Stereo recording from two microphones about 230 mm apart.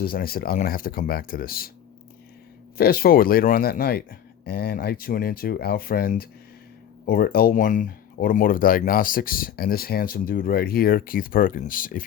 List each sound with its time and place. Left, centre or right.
0.0 s speech: left
2.7 s speech: left